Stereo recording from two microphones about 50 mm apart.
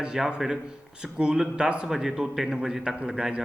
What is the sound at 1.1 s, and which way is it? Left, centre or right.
Speech, centre.